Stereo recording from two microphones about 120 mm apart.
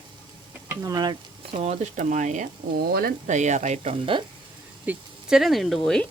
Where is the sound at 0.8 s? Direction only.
30° right (ahead or behind).